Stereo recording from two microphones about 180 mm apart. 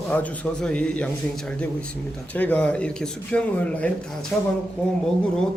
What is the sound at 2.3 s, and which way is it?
Speech, 10° left (ahead or behind).